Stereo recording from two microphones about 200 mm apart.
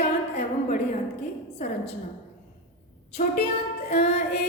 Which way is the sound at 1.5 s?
35° left (ahead or behind).